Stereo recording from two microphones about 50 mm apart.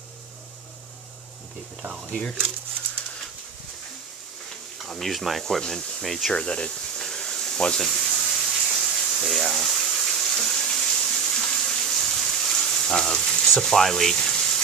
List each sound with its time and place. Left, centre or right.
2.1 s speech: centre
4.8 s speech: centre
5.7 s speech: centre
6.0 s speech: centre
6.3 s a sound: centre
12.4 s frying: centre